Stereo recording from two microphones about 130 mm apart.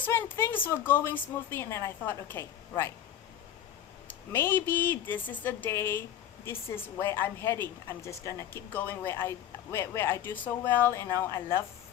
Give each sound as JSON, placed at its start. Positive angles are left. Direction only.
{"t": 0.0, "sound": "speech", "side_deg": 20}
{"t": 4.1, "sound": "a woman's voice", "side_deg": 15}